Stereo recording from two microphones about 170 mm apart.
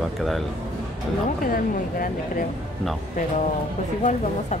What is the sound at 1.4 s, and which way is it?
Speech, 55° left (ahead or behind).